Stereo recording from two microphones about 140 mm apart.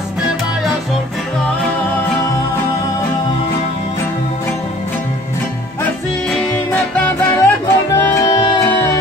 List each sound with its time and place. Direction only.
6.7 s music: 10° left (ahead or behind)